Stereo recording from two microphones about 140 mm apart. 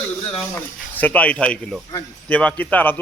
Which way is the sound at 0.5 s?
10° left (ahead or behind).